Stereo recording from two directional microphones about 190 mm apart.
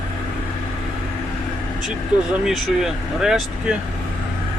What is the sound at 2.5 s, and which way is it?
Speech, centre (ahead or behind).